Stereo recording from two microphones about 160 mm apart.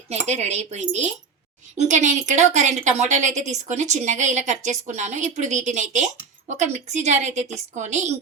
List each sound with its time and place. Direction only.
0.1 s a woman's voice: 40° right (ahead or behind)